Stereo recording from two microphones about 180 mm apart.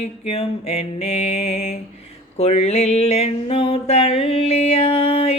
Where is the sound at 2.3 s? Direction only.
35° left (ahead or behind).